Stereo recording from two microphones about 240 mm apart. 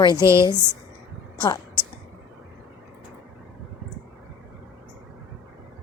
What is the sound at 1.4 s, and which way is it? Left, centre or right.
Speech, centre.